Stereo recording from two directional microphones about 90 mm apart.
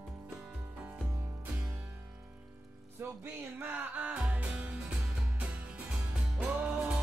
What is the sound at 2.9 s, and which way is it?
Music, 25° right (ahead or behind).